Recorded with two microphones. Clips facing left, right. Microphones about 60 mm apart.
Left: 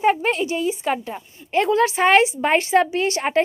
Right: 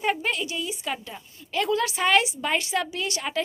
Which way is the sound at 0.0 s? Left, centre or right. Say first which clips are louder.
Left 7 dB; left.